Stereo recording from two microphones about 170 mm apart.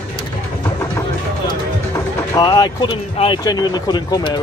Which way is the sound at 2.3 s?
25° left (ahead or behind).